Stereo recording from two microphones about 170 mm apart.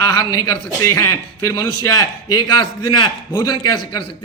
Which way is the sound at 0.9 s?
20° left (ahead or behind).